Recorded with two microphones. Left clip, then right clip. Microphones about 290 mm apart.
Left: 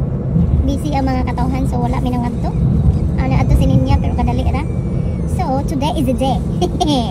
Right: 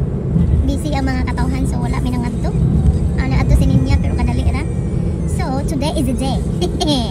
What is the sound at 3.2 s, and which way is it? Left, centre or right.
Vehicle, centre.